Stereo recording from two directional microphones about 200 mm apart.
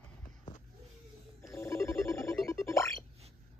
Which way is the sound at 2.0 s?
15° left (ahead or behind).